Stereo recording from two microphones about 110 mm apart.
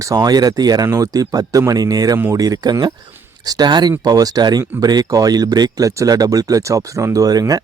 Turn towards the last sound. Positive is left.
turn(degrees=-35)  # may be behind; listen again after turning